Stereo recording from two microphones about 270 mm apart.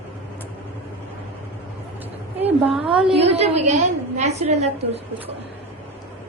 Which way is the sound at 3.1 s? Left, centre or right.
Right.